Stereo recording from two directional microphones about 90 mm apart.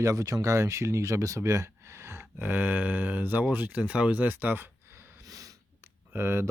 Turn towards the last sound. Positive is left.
turn(degrees=-30)  # may be behind; listen again after turning